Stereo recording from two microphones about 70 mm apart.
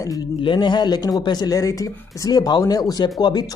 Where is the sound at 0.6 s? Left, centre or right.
Left.